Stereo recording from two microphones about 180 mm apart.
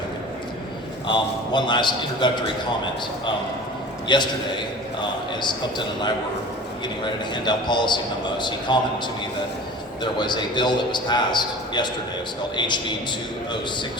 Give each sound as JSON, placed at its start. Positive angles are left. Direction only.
{"t": 1.0, "sound": "a man's voice", "side_deg": 25}
{"t": 4.1, "sound": "a man's voice", "side_deg": 25}
{"t": 10.0, "sound": "a man's voice", "side_deg": 25}